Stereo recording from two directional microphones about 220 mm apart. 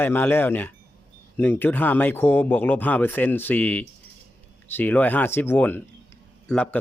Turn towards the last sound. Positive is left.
turn(degrees=5)  # may be behind; listen again after turning